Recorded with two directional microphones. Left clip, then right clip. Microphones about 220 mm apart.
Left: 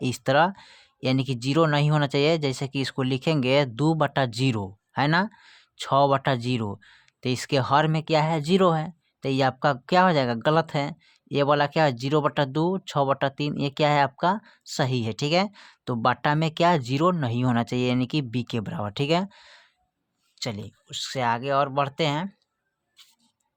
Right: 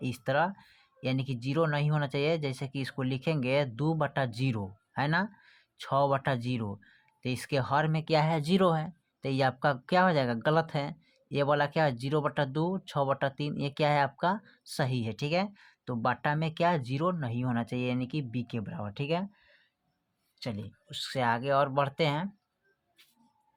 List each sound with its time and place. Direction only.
0.0 s speech: 30° left (ahead or behind)